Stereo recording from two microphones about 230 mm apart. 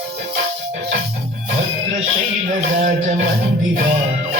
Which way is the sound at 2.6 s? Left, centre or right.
Right.